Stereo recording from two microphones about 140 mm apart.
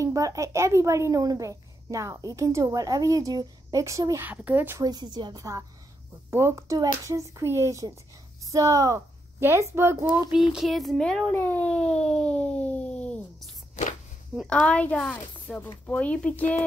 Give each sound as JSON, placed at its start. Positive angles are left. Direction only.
{"t": 0.0, "sound": "a woman's voice", "side_deg": -25}
{"t": 4.3, "sound": "speech", "side_deg": -10}
{"t": 4.8, "sound": "a woman's voice", "side_deg": -30}
{"t": 10.3, "sound": "a sound", "side_deg": -5}
{"t": 11.3, "sound": "speech", "side_deg": 10}
{"t": 14.5, "sound": "speech", "side_deg": 10}